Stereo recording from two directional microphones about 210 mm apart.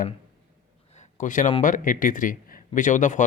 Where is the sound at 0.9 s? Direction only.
35° left (ahead or behind).